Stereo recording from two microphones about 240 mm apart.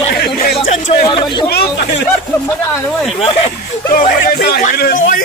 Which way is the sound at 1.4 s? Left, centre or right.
Left.